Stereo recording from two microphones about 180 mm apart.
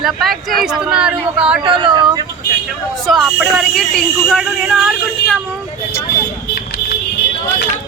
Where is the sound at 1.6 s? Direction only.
25° right (ahead or behind).